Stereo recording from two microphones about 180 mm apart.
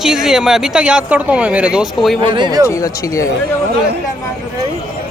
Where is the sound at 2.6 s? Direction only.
20° left (ahead or behind).